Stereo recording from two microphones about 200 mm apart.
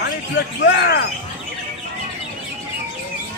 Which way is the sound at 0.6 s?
55° left (ahead or behind).